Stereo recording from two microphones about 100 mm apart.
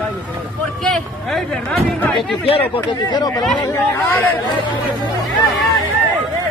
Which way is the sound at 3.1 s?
40° left (ahead or behind).